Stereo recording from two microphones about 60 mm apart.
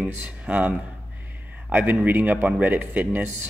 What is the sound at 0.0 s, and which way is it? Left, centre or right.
Speech, right.